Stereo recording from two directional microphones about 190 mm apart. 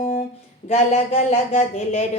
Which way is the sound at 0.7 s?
35° left (ahead or behind).